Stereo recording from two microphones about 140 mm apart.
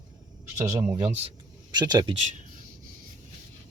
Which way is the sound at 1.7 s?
30° right (ahead or behind).